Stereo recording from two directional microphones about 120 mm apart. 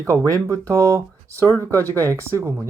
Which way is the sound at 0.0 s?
25° right (ahead or behind).